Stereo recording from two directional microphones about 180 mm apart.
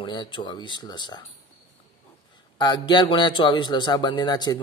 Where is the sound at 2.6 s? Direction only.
25° left (ahead or behind).